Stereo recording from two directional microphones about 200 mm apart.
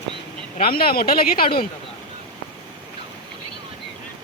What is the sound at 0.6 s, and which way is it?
Speech, 50° left (ahead or behind).